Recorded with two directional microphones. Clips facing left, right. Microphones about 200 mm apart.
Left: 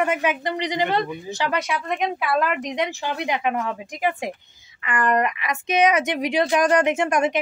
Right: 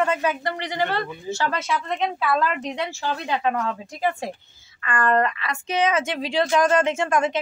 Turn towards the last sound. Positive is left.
turn(degrees=20)  # may be behind; listen again after turning